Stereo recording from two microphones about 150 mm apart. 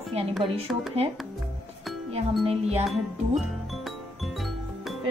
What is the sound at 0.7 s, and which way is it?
Speech, centre (ahead or behind).